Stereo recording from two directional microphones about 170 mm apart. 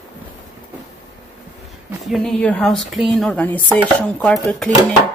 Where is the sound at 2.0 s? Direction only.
Centre (ahead or behind).